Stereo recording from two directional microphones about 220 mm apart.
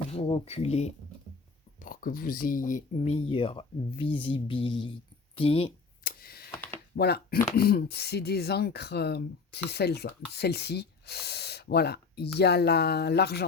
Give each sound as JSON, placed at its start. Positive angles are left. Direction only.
{"t": 0.1, "sound": "speech", "side_deg": 25}
{"t": 1.8, "sound": "speech", "side_deg": 40}
{"t": 6.0, "sound": "a sound", "side_deg": 40}
{"t": 6.5, "sound": "computer keyboard", "side_deg": 10}
{"t": 6.9, "sound": "speech", "side_deg": 45}